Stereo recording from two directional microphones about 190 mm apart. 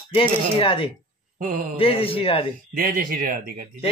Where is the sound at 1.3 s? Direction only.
45° right (ahead or behind).